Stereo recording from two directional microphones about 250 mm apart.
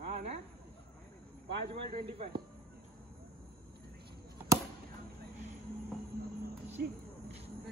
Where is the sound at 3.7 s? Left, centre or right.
Right.